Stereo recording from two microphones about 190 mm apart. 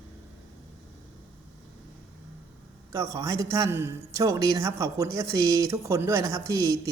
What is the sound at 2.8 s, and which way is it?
A man's voice, 15° right (ahead or behind).